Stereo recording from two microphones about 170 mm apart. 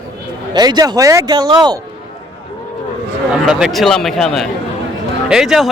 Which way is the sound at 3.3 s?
5° right (ahead or behind).